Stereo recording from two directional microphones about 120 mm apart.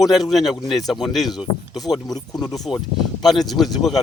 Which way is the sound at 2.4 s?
Centre (ahead or behind).